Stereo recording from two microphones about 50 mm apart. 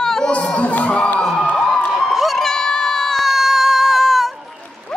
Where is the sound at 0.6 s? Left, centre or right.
Left.